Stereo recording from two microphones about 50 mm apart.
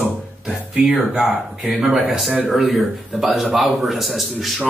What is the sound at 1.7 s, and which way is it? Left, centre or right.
Speech, centre.